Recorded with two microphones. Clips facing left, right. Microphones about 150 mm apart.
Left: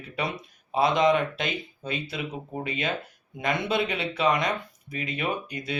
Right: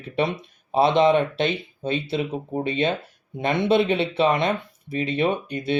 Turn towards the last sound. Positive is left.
turn(degrees=-30)  # may be behind; listen again after turning